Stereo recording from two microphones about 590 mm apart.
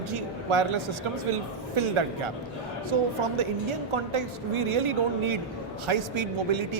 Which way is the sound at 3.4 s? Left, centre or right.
Right.